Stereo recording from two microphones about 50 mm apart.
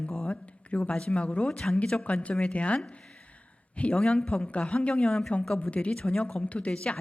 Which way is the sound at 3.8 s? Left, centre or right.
Left.